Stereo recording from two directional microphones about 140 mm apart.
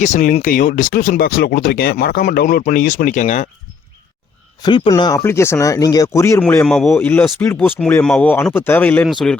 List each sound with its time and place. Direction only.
0.0 s speech: 65° left (ahead or behind)
4.6 s speech: 30° left (ahead or behind)
6.7 s a man's voice: 5° left (ahead or behind)